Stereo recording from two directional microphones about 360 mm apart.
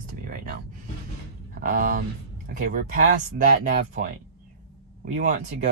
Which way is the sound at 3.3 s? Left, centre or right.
Right.